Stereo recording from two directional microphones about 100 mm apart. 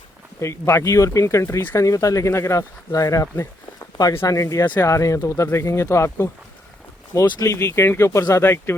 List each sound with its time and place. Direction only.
0.3 s speech: 30° left (ahead or behind)